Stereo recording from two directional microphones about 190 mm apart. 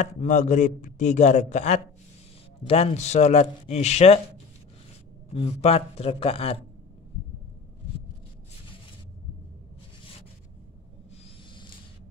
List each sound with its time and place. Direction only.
0.0 s a man's voice: 40° left (ahead or behind)
5.3 s a man's voice: 35° left (ahead or behind)